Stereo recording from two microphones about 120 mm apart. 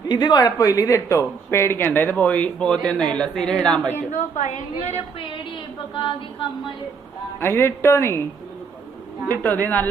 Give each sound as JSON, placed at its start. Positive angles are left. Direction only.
{"t": 0.1, "sound": "a woman's voice", "side_deg": 35}
{"t": 3.9, "sound": "a woman's voice", "side_deg": 85}
{"t": 7.3, "sound": "speech", "side_deg": 20}
{"t": 9.3, "sound": "speech", "side_deg": 15}